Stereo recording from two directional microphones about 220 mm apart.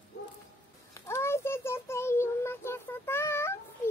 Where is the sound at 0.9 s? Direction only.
10° left (ahead or behind).